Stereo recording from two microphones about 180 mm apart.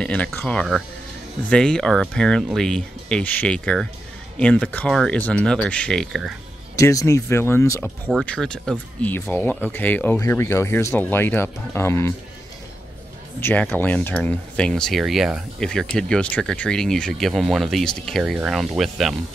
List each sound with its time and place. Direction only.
0.0 s speech: 5° left (ahead or behind)
6.8 s speech: 20° left (ahead or behind)
13.4 s speech: 10° left (ahead or behind)